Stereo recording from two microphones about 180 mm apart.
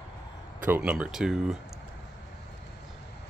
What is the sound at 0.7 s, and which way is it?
Speech, 10° right (ahead or behind).